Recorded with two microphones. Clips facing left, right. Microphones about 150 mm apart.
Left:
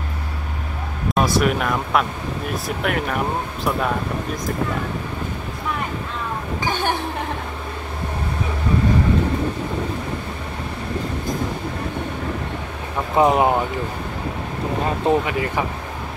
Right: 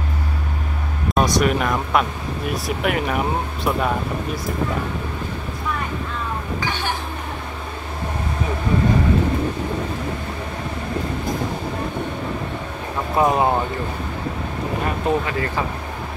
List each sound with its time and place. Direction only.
1.1 s speech: centre (ahead or behind)
13.1 s speech: 20° left (ahead or behind)
15.0 s speech: 15° left (ahead or behind)